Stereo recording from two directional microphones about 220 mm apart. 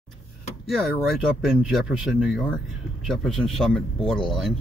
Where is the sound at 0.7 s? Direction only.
Centre (ahead or behind).